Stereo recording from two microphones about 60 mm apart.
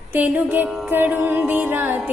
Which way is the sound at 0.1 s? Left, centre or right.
Right.